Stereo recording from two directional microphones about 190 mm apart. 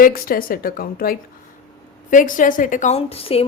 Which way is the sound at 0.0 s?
50° left (ahead or behind).